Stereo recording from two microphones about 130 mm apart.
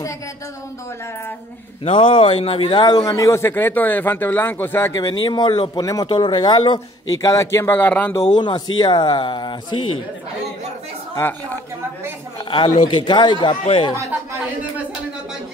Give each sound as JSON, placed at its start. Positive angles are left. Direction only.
{"t": 1.9, "sound": "a man's voice", "side_deg": 45}
{"t": 4.9, "sound": "speech", "side_deg": 30}
{"t": 7.2, "sound": "a man's voice", "side_deg": 25}
{"t": 8.4, "sound": "speech", "side_deg": 35}
{"t": 12.4, "sound": "speech", "side_deg": 40}